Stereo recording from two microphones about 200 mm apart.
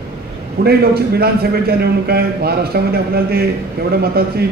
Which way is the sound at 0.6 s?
50° right (ahead or behind).